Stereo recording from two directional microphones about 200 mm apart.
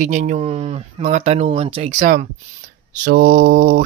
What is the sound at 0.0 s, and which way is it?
Speech, 35° right (ahead or behind).